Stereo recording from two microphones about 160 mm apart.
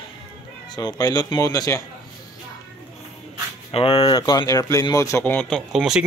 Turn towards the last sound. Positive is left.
turn(degrees=-5)  # may be behind; listen again after turning